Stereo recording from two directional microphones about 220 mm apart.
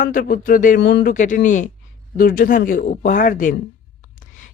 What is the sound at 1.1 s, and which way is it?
A woman's voice, 35° left (ahead or behind).